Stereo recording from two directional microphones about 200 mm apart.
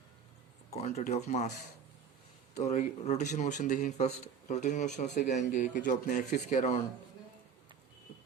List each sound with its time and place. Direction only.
0.7 s speech: 35° left (ahead or behind)
2.6 s speech: 35° left (ahead or behind)